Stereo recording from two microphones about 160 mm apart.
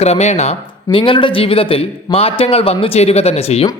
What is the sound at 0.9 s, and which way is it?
Speech, 30° left (ahead or behind).